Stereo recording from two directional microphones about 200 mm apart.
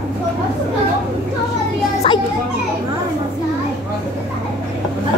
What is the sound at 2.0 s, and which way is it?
Children playing, 30° left (ahead or behind).